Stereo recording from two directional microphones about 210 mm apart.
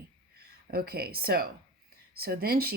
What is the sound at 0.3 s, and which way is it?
Speech, 45° right (ahead or behind).